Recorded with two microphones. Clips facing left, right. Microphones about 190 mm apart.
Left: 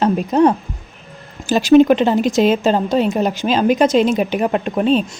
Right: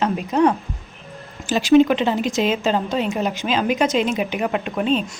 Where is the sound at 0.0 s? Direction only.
35° left (ahead or behind).